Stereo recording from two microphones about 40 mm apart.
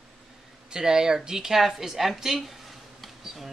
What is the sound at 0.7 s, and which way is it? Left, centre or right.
Speech, centre.